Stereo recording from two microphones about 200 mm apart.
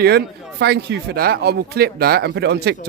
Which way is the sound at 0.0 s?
55° right (ahead or behind).